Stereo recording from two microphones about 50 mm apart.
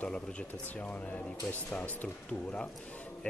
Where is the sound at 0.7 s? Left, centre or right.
Left.